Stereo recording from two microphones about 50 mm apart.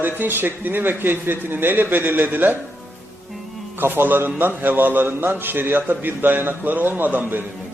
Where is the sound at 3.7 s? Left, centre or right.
Right.